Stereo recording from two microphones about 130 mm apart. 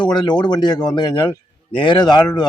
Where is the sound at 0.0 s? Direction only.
35° left (ahead or behind).